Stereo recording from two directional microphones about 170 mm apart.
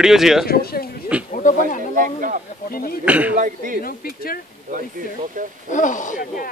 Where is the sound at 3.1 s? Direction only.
10° right (ahead or behind).